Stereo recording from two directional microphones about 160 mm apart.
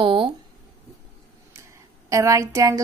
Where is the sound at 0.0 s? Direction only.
30° right (ahead or behind).